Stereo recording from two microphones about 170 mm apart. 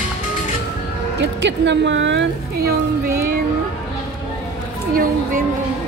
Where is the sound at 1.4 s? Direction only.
90° right; by 3.2 s 65° right (ahead or behind).